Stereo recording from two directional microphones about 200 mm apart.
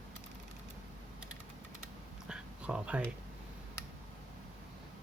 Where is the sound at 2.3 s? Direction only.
5° right (ahead or behind).